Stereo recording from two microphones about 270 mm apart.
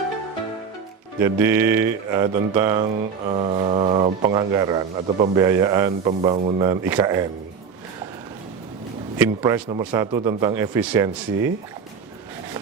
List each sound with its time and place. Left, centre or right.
1.2 s mantra: centre
9.1 s mantra: centre